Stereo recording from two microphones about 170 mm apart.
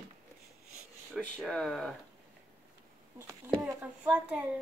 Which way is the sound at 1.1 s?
Centre (ahead or behind).